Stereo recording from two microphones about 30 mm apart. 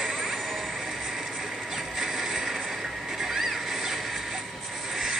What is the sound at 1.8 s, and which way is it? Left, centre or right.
Vehicle, centre.